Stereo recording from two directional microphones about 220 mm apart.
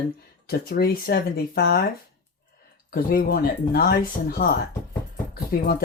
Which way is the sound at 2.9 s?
40° left (ahead or behind).